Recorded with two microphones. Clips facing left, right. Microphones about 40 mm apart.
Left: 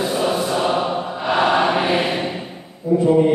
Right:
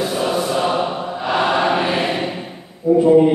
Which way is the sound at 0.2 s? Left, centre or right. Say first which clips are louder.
Right 2 dB; centre.